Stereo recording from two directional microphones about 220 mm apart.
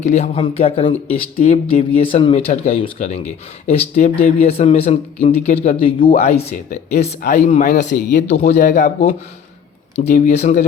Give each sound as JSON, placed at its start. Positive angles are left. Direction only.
{"t": 0.0, "sound": "speech", "side_deg": 30}